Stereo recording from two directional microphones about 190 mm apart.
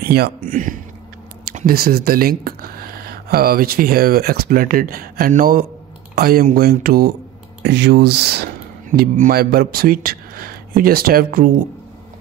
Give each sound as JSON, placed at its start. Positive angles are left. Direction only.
{"t": 0.0, "sound": "speech", "side_deg": -55}